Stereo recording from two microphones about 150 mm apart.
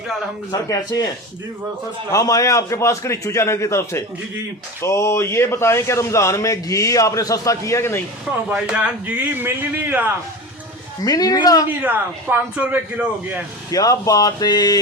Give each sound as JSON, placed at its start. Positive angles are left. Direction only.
{"t": 0.5, "sound": "speech", "side_deg": 25}
{"t": 2.1, "sound": "speech", "side_deg": 20}
{"t": 8.4, "sound": "a man's voice", "side_deg": -10}
{"t": 11.0, "sound": "speech", "side_deg": 25}
{"t": 11.8, "sound": "a man's voice", "side_deg": -10}
{"t": 13.7, "sound": "speech", "side_deg": 25}